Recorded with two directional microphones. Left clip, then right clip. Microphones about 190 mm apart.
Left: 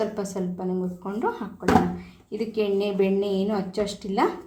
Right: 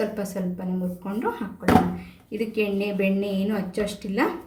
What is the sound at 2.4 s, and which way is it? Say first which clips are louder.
A woman's voice: left 1 dB; 30° left (ahead or behind).